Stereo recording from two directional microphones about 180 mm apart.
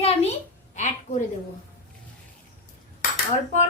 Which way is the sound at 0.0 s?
35° left (ahead or behind).